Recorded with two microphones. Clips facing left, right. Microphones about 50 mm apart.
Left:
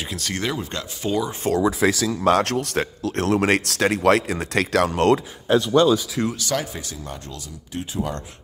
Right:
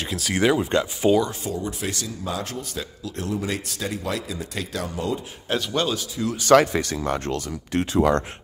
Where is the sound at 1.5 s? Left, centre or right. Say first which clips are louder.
Left 8 dB; left.